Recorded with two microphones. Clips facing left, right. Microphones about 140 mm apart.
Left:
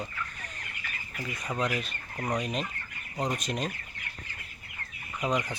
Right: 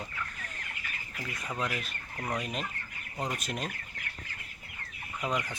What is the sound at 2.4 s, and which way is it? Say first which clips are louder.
Speech: left 3 dB; 5° right (ahead or behind).